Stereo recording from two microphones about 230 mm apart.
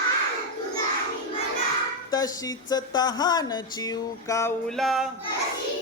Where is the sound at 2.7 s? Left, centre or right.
Centre.